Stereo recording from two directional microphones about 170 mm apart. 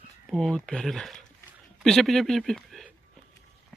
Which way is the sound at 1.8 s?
Centre (ahead or behind).